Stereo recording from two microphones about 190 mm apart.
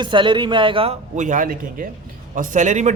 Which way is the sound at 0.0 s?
25° right (ahead or behind).